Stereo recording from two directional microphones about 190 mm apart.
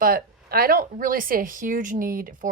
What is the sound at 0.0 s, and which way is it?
Speech, 50° right (ahead or behind).